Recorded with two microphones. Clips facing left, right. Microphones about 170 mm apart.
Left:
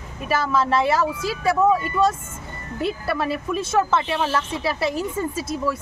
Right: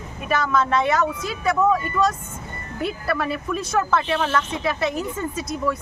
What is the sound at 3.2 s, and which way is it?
A woman's voice, 30° left (ahead or behind).